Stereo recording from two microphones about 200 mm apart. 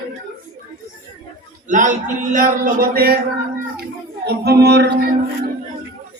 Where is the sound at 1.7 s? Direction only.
40° right (ahead or behind).